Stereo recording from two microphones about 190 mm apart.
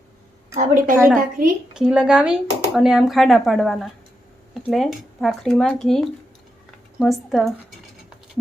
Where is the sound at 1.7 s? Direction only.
5° right (ahead or behind).